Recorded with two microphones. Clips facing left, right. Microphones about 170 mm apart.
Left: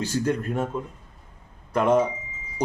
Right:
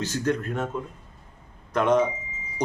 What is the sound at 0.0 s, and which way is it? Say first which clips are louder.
Speech: left 1 dB; 10° left (ahead or behind).